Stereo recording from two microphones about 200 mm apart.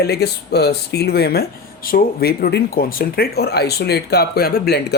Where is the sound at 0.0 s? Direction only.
55° left (ahead or behind).